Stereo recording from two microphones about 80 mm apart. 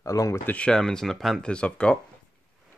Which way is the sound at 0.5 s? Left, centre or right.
Centre.